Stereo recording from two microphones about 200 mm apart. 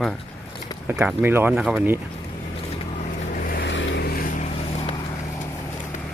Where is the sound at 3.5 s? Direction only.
65° left (ahead or behind).